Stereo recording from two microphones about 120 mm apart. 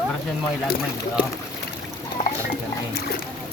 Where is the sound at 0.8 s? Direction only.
10° right (ahead or behind).